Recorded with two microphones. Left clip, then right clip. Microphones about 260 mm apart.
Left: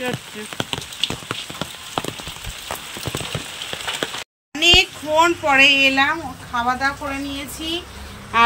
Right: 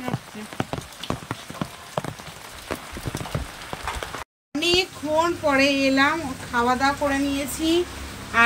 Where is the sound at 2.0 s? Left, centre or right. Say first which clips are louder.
Left 4 dB; right.